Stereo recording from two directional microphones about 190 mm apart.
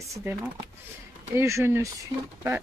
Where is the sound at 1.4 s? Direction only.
15° right (ahead or behind).